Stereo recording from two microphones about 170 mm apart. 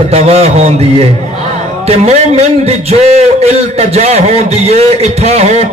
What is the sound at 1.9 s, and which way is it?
A man's voice, 40° right (ahead or behind).